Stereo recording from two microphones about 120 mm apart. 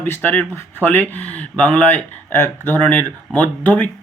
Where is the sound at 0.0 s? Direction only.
15° left (ahead or behind).